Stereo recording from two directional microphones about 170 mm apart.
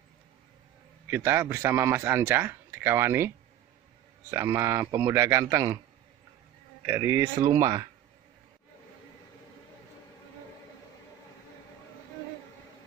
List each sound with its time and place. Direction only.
1.0 s a man's voice: 15° right (ahead or behind)
6.9 s a man's voice: 15° right (ahead or behind)